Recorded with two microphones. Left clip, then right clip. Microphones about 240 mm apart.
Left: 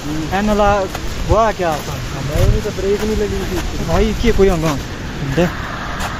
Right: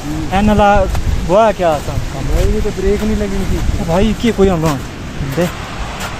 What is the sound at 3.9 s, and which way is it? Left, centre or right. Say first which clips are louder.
Speech: right 1 dB; right.